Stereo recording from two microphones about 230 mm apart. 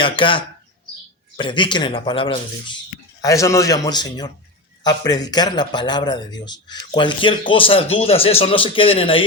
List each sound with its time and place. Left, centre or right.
0.0 s a man's voice: left